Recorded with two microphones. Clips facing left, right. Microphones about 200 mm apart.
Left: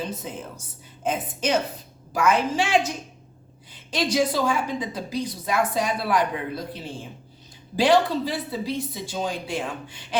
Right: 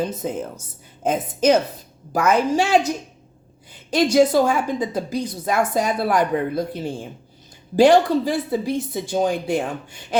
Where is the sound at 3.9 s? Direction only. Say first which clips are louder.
Right 8 dB; 45° right (ahead or behind).